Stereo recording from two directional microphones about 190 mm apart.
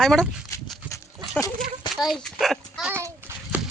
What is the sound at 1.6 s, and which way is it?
A child's voice, centre (ahead or behind).